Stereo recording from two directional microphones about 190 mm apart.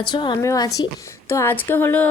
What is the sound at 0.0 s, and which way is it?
A woman's voice, 25° left (ahead or behind).